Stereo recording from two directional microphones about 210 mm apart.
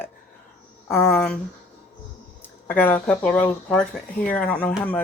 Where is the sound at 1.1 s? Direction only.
5° left (ahead or behind).